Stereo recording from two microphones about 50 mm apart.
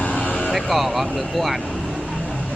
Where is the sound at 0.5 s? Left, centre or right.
Centre.